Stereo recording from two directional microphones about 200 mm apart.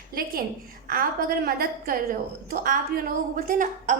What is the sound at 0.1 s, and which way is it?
A woman's voice, 45° right (ahead or behind).